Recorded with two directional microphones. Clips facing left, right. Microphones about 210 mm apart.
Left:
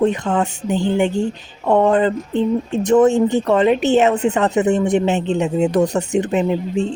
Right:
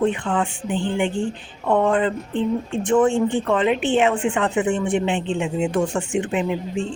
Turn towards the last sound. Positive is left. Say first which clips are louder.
# left 5 dB
turn(degrees=40)  # may be behind; listen again after turning